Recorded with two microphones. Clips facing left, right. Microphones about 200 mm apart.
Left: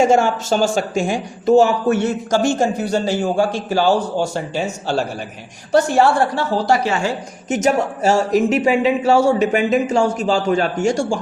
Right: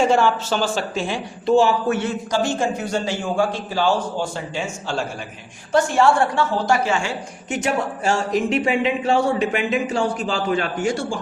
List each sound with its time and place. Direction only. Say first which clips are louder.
0.0 s a woman's voice: left 3 dB; 45° left (ahead or behind)